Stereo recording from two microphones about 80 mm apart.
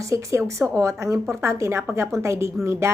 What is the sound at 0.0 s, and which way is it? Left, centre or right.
A woman's voice, right.